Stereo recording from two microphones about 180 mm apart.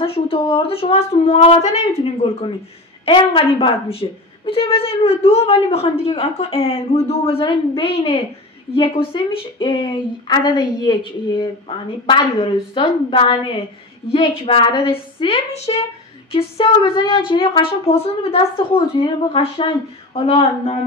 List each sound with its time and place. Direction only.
0.0 s a woman's voice: 30° left (ahead or behind)
3.1 s a woman's voice: 30° left (ahead or behind)